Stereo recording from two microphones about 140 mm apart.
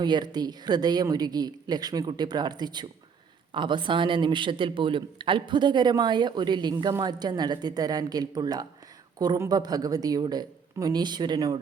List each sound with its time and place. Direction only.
0.0 s a man's voice: 30° right (ahead or behind)